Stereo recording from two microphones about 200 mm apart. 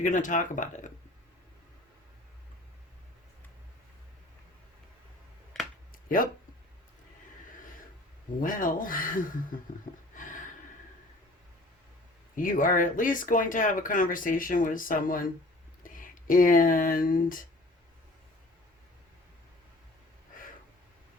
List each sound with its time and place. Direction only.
0.0 s speech: 40° left (ahead or behind)
8.4 s speech: 40° left (ahead or behind)
10.2 s a sound: 40° left (ahead or behind)
12.4 s speech: 40° left (ahead or behind)